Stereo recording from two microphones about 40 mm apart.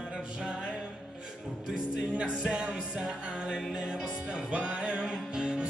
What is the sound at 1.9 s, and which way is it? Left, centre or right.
Music, right.